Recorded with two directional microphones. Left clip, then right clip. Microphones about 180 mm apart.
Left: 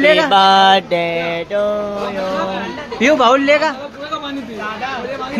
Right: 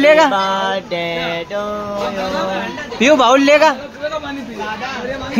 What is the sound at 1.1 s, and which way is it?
Mantra, 10° left (ahead or behind).